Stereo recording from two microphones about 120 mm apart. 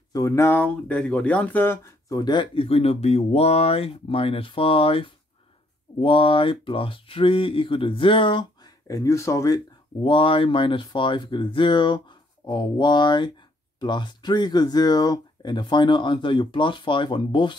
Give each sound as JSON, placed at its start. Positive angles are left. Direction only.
{"t": 0.1, "sound": "speech", "side_deg": 30}
{"t": 0.5, "sound": "speech", "side_deg": 15}
{"t": 2.0, "sound": "speech", "side_deg": 35}
{"t": 8.8, "sound": "speech", "side_deg": 25}
{"t": 10.0, "sound": "speech", "side_deg": 45}